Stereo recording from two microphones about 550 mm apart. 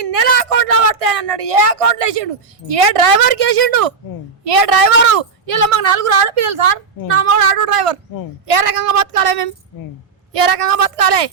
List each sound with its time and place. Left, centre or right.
0.0 s a woman's voice: right